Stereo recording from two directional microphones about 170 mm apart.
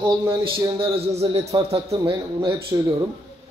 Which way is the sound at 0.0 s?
30° right (ahead or behind).